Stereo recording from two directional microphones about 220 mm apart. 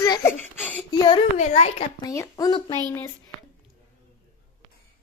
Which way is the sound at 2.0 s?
15° left (ahead or behind).